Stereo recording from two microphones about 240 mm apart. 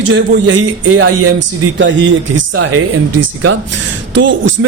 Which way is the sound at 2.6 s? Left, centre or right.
Right.